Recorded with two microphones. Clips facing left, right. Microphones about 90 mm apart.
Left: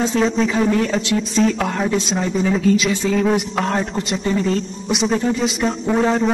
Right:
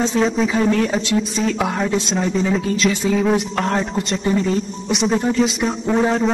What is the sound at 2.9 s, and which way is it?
Speech, 15° right (ahead or behind).